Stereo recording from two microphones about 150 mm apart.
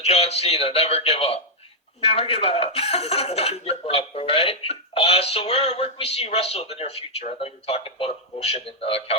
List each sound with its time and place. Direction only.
0.0 s speech: 45° left (ahead or behind)